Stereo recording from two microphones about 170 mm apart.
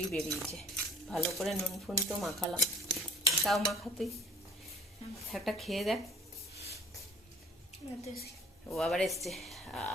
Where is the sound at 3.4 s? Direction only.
Centre (ahead or behind).